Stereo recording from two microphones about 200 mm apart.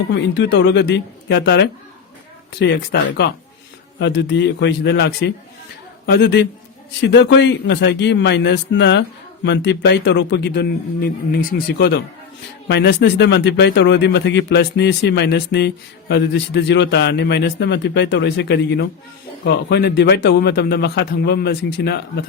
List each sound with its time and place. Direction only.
0.1 s speech: 60° left (ahead or behind)